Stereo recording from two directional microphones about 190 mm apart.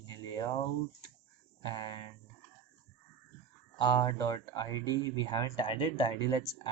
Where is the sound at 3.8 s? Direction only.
20° left (ahead or behind).